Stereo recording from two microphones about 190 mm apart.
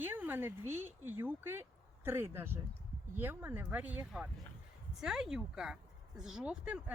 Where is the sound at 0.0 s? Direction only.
10° right (ahead or behind).